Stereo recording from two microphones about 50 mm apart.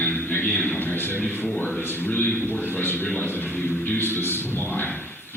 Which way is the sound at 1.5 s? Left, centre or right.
Left.